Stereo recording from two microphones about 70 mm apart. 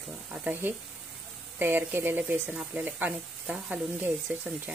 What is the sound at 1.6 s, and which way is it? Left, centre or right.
Speech, right.